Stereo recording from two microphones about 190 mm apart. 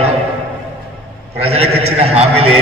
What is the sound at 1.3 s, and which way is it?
A man's voice, 30° right (ahead or behind).